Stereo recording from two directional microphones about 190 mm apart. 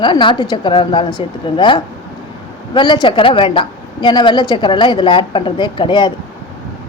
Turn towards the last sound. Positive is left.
turn(degrees=25)  # may be behind; listen again after turning